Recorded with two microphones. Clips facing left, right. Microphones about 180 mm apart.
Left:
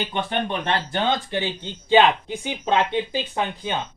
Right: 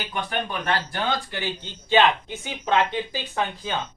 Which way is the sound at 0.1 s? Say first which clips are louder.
Left 3 dB; 25° left (ahead or behind).